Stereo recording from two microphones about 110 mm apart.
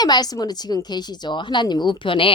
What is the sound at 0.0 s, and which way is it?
A woman's voice, 40° left (ahead or behind).